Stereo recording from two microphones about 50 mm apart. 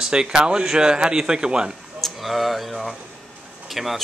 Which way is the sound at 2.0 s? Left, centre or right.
Centre.